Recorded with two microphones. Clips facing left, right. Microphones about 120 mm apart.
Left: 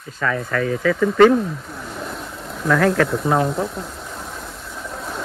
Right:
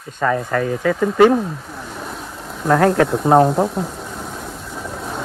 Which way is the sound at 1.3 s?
Centre (ahead or behind).